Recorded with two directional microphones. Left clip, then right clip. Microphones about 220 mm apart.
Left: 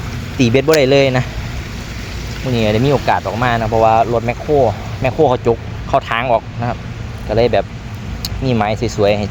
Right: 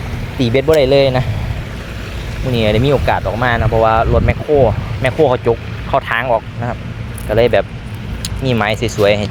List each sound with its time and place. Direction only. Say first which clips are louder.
0.3 s speech: even; 20° left (ahead or behind)
2.5 s speech: right 1 dB; 10° left (ahead or behind)